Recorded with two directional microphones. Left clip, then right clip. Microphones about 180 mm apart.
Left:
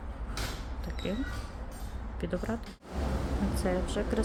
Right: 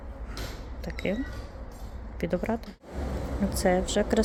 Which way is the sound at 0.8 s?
20° right (ahead or behind).